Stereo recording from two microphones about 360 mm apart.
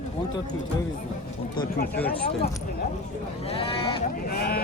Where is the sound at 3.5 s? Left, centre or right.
Centre.